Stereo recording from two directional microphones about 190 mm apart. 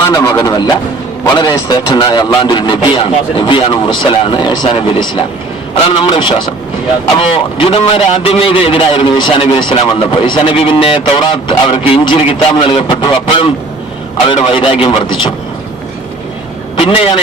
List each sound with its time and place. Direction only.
0.1 s a man's voice: 20° left (ahead or behind)
16.7 s a man's voice: 30° left (ahead or behind)